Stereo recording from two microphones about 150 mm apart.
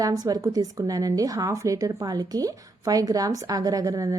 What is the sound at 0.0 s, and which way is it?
A woman's voice, 25° right (ahead or behind).